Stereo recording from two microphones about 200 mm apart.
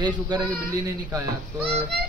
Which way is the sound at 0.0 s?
20° right (ahead or behind).